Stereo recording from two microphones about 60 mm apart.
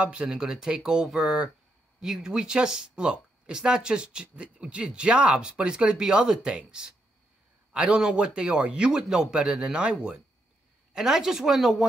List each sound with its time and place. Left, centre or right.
0.2 s speech: centre